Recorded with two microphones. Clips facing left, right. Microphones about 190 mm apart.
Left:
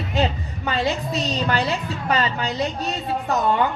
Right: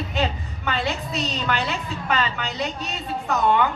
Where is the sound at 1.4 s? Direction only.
35° left (ahead or behind).